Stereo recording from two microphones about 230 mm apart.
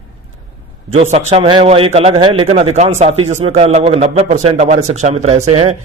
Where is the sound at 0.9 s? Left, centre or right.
Right.